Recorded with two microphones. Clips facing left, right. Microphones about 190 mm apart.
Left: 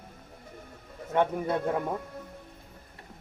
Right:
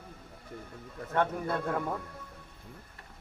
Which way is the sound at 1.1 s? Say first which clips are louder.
Left 3 dB; 15° left (ahead or behind).